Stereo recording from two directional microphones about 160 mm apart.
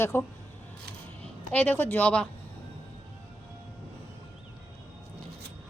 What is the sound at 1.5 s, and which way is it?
Speech, 10° left (ahead or behind).